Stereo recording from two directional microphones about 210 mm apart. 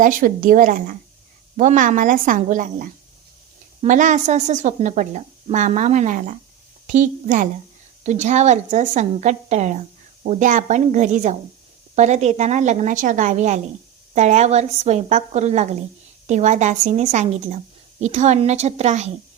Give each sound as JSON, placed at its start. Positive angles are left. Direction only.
{"t": 0.0, "sound": "speech", "side_deg": -40}